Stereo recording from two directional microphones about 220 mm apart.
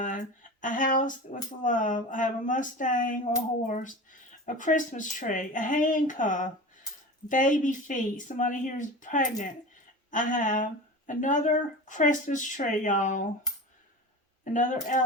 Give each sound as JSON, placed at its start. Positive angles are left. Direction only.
{"t": 0.0, "sound": "speech", "side_deg": 35}
{"t": 14.4, "sound": "speech", "side_deg": 35}